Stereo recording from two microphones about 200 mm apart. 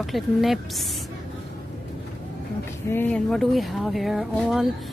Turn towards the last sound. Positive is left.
turn(degrees=0)  # may be behind; listen again after turning